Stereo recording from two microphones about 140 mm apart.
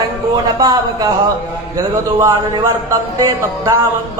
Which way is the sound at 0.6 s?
30° right (ahead or behind).